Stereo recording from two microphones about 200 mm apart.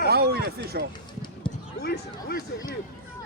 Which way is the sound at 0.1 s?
50° right (ahead or behind).